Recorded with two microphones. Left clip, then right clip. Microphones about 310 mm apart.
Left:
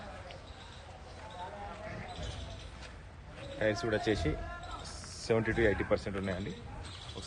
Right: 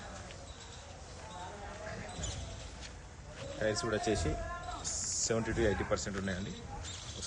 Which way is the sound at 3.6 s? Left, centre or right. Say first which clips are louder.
Left 2 dB; left.